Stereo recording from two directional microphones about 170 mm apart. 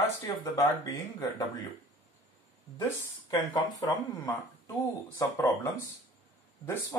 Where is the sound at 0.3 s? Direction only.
20° left (ahead or behind).